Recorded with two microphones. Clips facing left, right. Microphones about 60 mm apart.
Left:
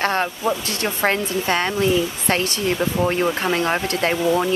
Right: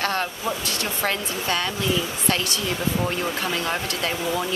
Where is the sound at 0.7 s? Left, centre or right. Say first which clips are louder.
Left 5 dB; left.